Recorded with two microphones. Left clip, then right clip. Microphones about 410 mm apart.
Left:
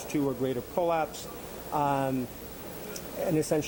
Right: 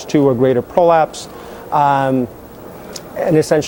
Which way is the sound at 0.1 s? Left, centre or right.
Right.